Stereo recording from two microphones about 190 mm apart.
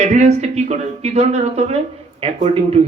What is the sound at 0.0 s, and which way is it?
A man's voice, 35° right (ahead or behind).